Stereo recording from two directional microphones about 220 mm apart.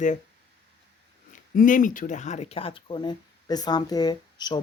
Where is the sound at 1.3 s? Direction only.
35° left (ahead or behind).